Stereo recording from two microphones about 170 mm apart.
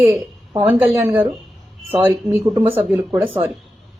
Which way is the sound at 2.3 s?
15° right (ahead or behind).